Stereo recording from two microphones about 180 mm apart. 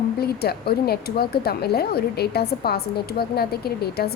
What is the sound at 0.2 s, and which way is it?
Speech, 60° left (ahead or behind).